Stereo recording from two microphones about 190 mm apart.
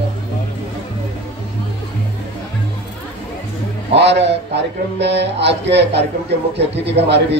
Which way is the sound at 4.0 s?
65° right (ahead or behind).